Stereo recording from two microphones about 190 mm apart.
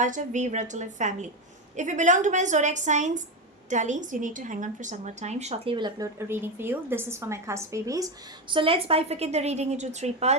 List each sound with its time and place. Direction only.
0.0 s a woman's voice: 40° right (ahead or behind)